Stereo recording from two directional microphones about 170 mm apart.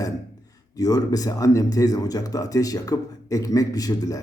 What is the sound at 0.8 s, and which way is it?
Speech, 20° left (ahead or behind).